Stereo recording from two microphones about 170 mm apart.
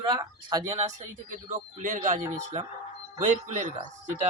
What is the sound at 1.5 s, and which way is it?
Speech, 50° right (ahead or behind).